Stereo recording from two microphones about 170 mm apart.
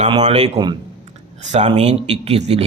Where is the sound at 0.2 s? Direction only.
40° right (ahead or behind).